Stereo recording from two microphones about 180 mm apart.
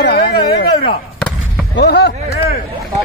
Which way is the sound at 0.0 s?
65° left (ahead or behind).